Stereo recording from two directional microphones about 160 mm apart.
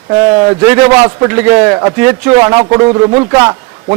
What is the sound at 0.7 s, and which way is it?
A man's voice, 15° right (ahead or behind).